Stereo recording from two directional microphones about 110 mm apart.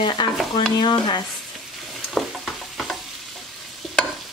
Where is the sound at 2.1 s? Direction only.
Centre (ahead or behind).